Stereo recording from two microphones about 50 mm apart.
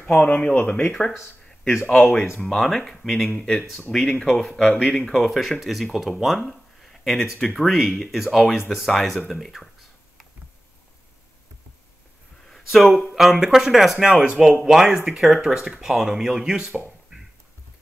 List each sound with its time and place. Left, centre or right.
0.2 s speech: left
1.0 s speech: centre
5.0 s speech: centre
6.8 s a sound: centre
7.5 s speech: centre
12.6 s speech: centre
14.2 s speech: right
14.6 s speech: centre